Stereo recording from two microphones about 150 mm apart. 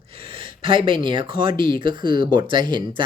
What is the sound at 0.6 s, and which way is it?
Speech, 35° right (ahead or behind).